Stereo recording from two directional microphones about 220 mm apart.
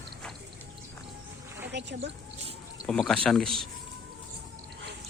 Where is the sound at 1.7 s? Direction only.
50° right (ahead or behind).